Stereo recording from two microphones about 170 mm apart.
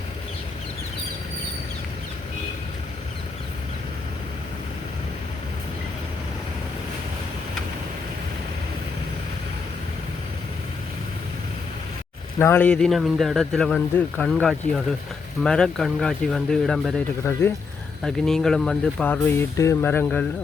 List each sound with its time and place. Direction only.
12.4 s speech: 15° left (ahead or behind)
17.2 s speech: 15° left (ahead or behind)
18.0 s speech: 5° left (ahead or behind)